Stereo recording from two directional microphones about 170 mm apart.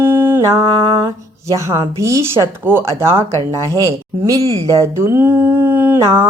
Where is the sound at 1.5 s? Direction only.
15° right (ahead or behind).